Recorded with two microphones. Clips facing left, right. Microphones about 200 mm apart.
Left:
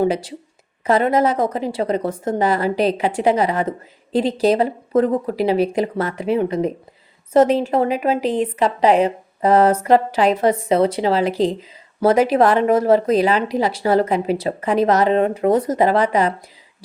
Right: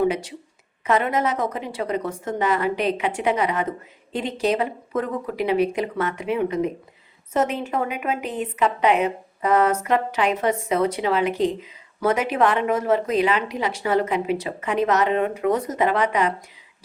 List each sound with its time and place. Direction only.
0.0 s a woman's voice: 30° left (ahead or behind)